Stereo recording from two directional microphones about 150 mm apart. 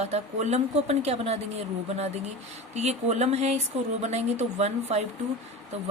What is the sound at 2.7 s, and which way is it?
Speech, 45° right (ahead or behind).